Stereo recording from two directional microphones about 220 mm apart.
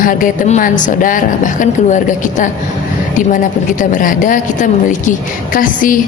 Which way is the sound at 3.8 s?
35° left (ahead or behind).